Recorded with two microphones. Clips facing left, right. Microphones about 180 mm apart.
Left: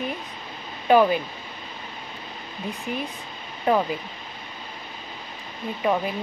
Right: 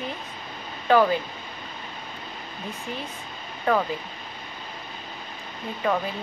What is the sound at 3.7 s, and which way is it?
Speech, 15° left (ahead or behind).